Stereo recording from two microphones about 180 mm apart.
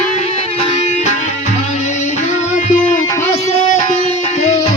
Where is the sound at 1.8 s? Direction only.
40° left (ahead or behind).